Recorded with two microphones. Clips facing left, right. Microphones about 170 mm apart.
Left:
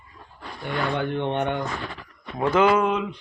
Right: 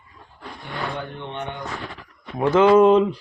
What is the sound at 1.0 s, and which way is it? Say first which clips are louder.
Speech: left 7 dB; 70° left (ahead or behind).